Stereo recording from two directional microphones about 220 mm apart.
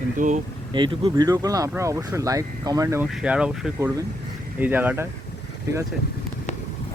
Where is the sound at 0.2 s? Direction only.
35° right (ahead or behind).